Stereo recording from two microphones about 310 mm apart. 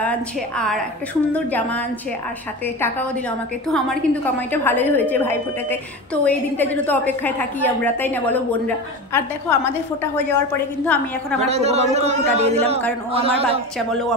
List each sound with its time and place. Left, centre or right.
0.0 s a woman's voice: centre
11.4 s a man's voice: centre
13.7 s a woman's voice: centre